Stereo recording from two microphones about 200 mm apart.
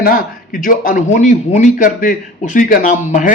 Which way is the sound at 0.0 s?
45° left (ahead or behind).